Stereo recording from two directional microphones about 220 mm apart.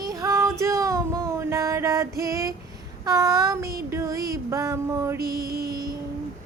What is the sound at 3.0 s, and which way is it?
Child singing, 15° right (ahead or behind).